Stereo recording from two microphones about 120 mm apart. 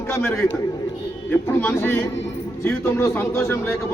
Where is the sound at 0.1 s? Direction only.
20° left (ahead or behind).